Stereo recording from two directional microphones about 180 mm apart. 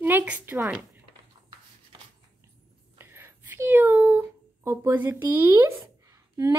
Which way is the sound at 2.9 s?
15° right (ahead or behind).